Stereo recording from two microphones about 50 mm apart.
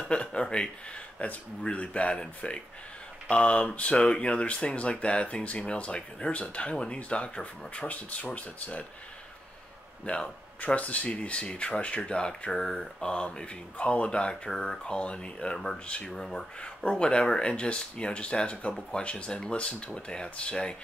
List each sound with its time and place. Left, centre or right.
0.1 s speech: left
10.0 s speech: left; by 16.4 s centre
16.5 s speech: left